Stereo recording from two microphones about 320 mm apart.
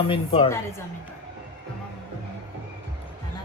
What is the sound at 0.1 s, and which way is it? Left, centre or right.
Speech, centre.